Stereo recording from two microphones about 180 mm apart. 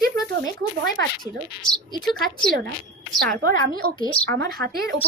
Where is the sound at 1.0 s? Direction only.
75° right (ahead or behind).